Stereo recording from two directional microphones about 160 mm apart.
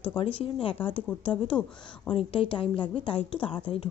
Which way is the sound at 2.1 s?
30° left (ahead or behind).